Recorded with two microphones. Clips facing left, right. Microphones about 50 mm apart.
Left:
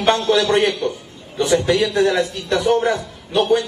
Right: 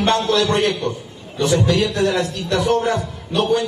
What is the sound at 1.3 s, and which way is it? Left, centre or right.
A man's voice, centre.